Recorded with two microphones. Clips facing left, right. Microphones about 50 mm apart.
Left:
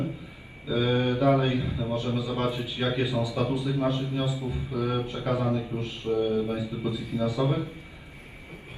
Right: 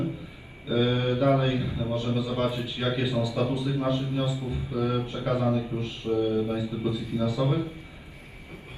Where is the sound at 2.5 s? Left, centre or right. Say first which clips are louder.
Even; right.